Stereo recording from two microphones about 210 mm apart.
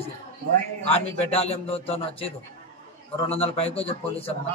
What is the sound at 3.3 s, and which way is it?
A man's voice, 30° left (ahead or behind).